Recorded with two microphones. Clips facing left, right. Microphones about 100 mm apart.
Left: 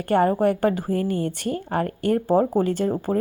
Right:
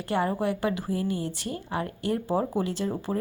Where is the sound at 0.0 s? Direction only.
50° left (ahead or behind).